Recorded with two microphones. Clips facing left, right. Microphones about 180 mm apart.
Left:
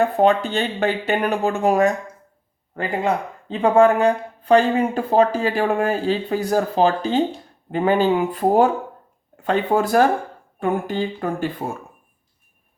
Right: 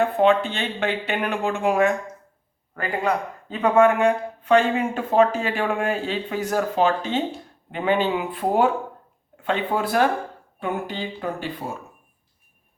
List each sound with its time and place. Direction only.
0.0 s speech: 40° left (ahead or behind)
2.7 s speech: 25° left (ahead or behind); by 11.7 s 50° left (ahead or behind)